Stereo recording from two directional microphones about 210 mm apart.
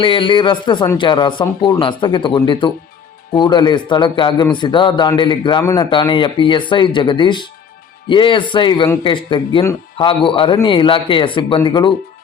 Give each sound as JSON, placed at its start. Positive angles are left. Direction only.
{"t": 0.0, "sound": "speech", "side_deg": 25}